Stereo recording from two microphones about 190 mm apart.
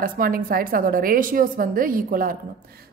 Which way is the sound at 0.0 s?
50° right (ahead or behind).